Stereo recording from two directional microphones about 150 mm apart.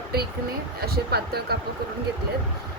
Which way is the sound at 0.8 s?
90° right.